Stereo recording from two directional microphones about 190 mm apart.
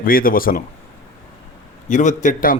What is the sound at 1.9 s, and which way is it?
Speech, 40° left (ahead or behind).